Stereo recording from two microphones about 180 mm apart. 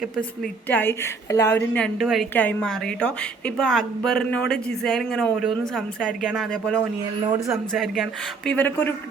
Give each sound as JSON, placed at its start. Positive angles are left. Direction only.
{"t": 0.7, "sound": "a woman's voice", "side_deg": 10}
{"t": 7.3, "sound": "speech", "side_deg": -15}
{"t": 7.7, "sound": "a woman's voice", "side_deg": 0}